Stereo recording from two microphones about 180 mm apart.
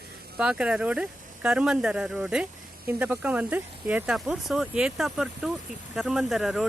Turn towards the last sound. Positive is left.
turn(degrees=0)  # may be behind; listen again after turning